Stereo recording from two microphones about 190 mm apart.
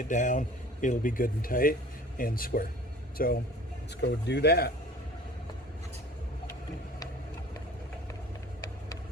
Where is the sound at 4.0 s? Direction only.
65° left (ahead or behind).